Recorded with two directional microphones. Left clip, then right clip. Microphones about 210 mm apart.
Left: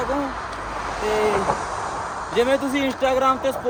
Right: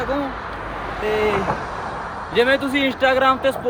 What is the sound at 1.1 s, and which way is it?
Speech, 45° left (ahead or behind).